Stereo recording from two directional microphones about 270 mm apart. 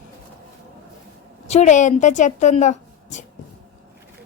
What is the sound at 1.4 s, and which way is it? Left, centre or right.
A woman's voice, left.